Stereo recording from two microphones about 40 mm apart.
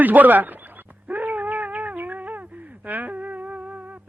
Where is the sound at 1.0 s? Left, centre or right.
Right.